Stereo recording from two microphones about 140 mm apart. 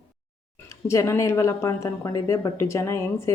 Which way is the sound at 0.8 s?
20° left (ahead or behind).